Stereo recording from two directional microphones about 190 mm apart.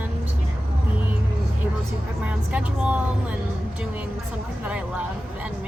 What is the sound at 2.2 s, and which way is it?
Speech, 5° right (ahead or behind).